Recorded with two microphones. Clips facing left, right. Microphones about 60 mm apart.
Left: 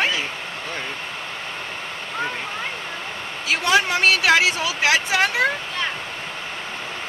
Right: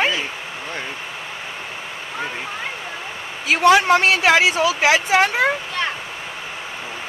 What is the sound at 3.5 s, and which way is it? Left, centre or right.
Speech, right.